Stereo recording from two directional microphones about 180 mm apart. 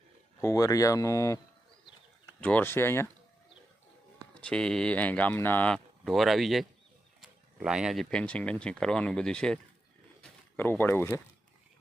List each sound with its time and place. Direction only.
0.4 s speech: 20° left (ahead or behind)
2.4 s speech: 10° left (ahead or behind)
4.4 s speech: 5° left (ahead or behind)
10.6 s speech: 10° left (ahead or behind)